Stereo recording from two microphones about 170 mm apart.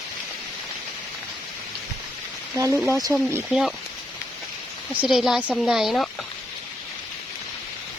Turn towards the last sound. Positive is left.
turn(degrees=0)  # may be behind; listen again after turning